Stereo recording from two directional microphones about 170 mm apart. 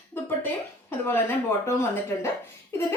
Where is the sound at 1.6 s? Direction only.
15° left (ahead or behind).